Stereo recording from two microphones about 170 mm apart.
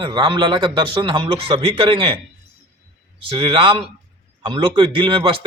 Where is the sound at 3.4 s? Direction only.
30° right (ahead or behind).